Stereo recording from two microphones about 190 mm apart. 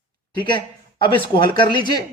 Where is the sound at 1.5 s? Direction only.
25° left (ahead or behind).